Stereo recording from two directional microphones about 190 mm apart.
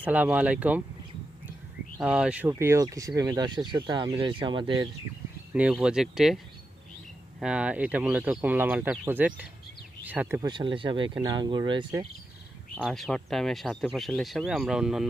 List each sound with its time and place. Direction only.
0.0 s speech: 10° right (ahead or behind)
2.0 s speech: 5° right (ahead or behind); by 4.9 s 25° right (ahead or behind)
5.5 s speech: 5° right (ahead or behind)
10.4 s speech: 25° right (ahead or behind)
12.7 s speech: centre (ahead or behind)